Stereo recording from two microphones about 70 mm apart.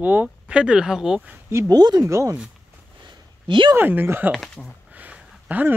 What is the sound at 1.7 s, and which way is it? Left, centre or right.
Speech, right.